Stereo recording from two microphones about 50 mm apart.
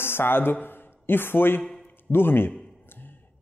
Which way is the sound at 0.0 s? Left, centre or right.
Left.